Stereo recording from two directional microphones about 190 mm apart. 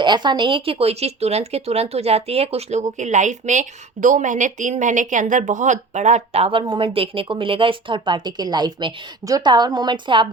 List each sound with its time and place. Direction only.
0.0 s speech: 25° right (ahead or behind)